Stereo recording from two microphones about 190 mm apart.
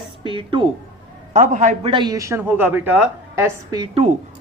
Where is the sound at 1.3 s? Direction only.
40° right (ahead or behind).